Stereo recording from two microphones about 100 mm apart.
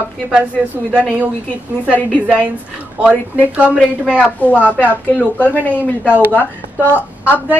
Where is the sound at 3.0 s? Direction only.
15° right (ahead or behind).